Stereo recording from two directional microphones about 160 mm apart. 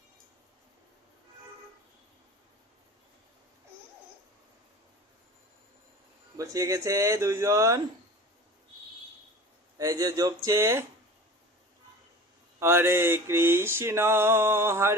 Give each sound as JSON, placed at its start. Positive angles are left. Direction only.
{"t": 6.3, "sound": "speech", "side_deg": -20}
{"t": 9.7, "sound": "speech", "side_deg": -20}
{"t": 12.5, "sound": "mantra", "side_deg": -15}